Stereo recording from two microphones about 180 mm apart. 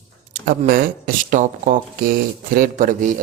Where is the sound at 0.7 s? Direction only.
55° right (ahead or behind).